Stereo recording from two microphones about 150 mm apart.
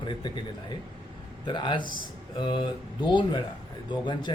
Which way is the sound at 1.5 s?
30° left (ahead or behind).